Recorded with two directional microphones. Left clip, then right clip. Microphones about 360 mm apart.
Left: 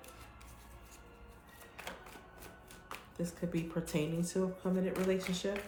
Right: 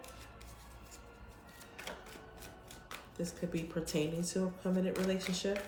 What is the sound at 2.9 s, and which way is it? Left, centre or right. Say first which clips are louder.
Speech: even; centre.